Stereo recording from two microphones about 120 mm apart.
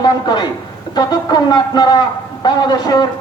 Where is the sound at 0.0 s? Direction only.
35° left (ahead or behind).